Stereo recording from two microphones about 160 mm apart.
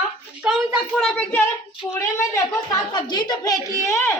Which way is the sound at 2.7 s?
25° left (ahead or behind).